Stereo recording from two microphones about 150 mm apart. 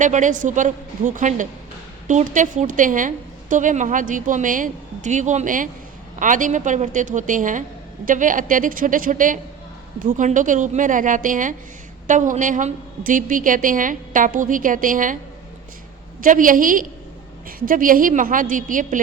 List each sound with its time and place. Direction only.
0.0 s a woman's voice: 55° right (ahead or behind)
16.2 s a woman's voice: 65° right (ahead or behind)